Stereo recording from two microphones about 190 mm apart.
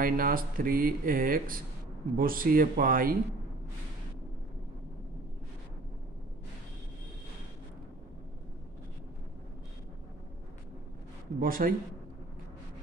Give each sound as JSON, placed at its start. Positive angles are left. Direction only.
{"t": 0.0, "sound": "speech", "side_deg": -50}
{"t": 11.3, "sound": "speech", "side_deg": -50}